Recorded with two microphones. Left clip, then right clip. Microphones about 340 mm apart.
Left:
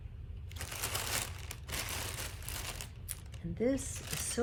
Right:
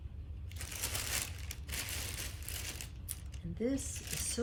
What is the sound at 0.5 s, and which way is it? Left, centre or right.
Crushing, centre.